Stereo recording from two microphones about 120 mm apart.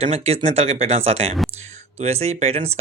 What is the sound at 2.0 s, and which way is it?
Speech, 60° right (ahead or behind).